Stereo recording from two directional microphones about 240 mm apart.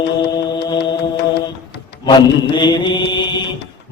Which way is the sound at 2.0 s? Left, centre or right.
Centre.